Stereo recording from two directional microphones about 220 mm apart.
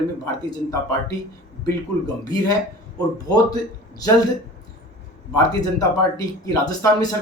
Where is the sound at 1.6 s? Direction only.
15° left (ahead or behind).